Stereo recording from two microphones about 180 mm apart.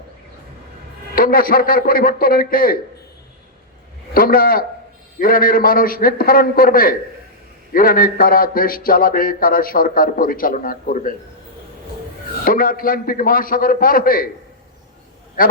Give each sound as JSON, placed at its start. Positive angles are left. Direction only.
{"t": 1.1, "sound": "a man's voice", "side_deg": 55}
{"t": 4.1, "sound": "a man's voice", "side_deg": 55}
{"t": 12.5, "sound": "a man's voice", "side_deg": 50}
{"t": 15.4, "sound": "a man's voice", "side_deg": 55}